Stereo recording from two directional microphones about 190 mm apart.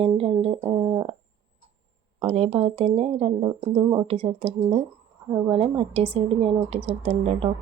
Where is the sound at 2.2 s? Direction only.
35° right (ahead or behind).